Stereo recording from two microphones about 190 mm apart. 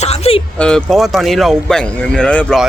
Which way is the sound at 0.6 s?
5° left (ahead or behind).